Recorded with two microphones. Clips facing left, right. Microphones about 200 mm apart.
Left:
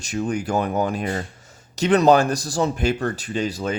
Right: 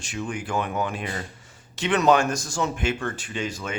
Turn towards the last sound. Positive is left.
turn(degrees=35)  # may be behind; listen again after turning